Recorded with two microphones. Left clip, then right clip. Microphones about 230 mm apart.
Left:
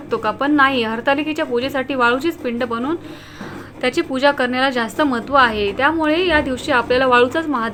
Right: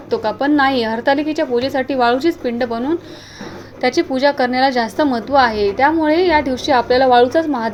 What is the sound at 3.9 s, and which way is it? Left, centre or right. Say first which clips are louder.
Speech: right 3 dB; centre.